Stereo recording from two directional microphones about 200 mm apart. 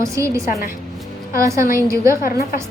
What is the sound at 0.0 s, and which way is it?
A woman's voice, 15° right (ahead or behind).